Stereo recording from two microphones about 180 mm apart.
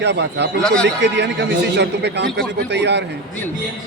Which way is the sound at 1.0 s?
75° right (ahead or behind).